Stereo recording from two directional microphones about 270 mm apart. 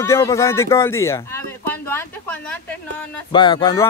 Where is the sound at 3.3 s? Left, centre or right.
Centre.